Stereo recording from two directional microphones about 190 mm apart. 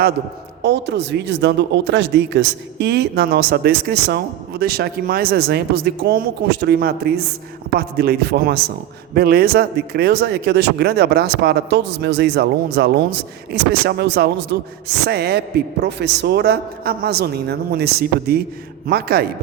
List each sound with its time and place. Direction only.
0.6 s speech: 65° right (ahead or behind)